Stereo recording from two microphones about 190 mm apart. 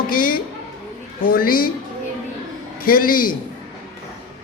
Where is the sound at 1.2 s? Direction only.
50° left (ahead or behind).